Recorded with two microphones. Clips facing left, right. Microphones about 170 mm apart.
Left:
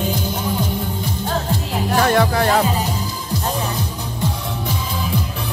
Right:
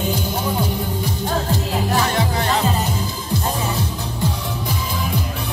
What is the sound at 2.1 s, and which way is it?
Music, 55° left (ahead or behind).